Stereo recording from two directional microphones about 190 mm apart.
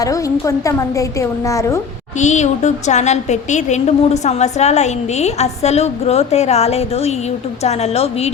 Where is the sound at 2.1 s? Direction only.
40° left (ahead or behind).